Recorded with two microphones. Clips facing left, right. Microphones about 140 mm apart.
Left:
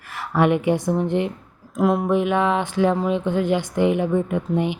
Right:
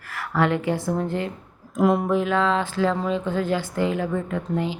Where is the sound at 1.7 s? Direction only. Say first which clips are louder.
Even; centre (ahead or behind).